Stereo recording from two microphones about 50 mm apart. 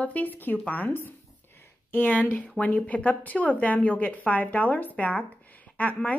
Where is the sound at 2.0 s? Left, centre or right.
Left.